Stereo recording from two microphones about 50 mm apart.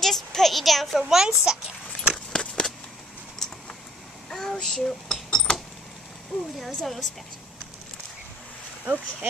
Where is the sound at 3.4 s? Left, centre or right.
Centre.